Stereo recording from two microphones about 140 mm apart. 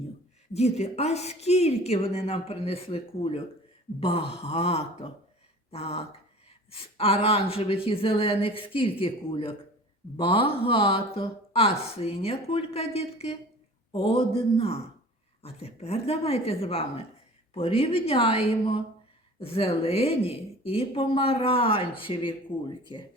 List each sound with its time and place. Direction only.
0.5 s speech: 50° left (ahead or behind); by 23.1 s 35° left (ahead or behind)